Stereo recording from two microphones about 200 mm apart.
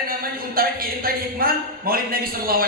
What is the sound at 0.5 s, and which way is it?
Speech, 45° right (ahead or behind).